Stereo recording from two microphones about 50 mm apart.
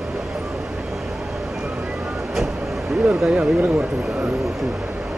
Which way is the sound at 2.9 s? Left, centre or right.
Right.